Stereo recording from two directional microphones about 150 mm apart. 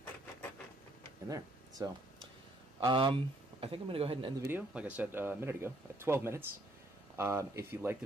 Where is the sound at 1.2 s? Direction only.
25° right (ahead or behind).